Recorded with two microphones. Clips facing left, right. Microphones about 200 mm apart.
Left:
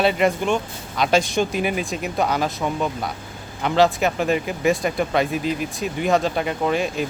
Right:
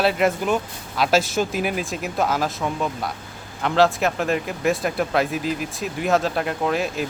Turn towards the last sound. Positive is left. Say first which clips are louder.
# left 1 dB
turn(degrees=0)  # may be behind; listen again after turning